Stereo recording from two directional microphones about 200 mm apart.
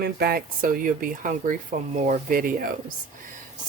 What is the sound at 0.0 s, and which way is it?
Speech, 50° right (ahead or behind).